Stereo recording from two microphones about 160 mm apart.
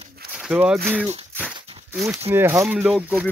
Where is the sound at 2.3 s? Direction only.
15° right (ahead or behind).